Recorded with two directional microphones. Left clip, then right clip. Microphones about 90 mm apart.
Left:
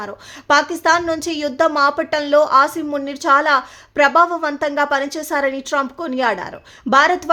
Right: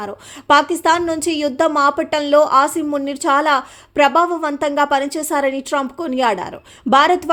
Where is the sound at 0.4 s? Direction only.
25° right (ahead or behind).